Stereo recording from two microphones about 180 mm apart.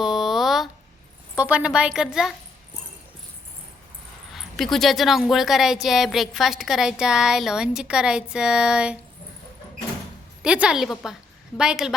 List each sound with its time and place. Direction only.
0.0 s a sound: centre (ahead or behind)
1.4 s a woman's voice: 10° right (ahead or behind)
4.3 s a woman's voice: centre (ahead or behind)
10.4 s a woman's voice: 5° right (ahead or behind)